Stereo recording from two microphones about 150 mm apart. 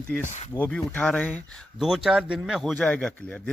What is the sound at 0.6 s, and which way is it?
Speech, 10° left (ahead or behind).